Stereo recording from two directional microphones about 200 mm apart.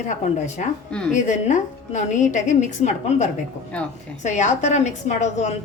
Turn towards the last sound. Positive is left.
turn(degrees=35)  # may be behind; listen again after turning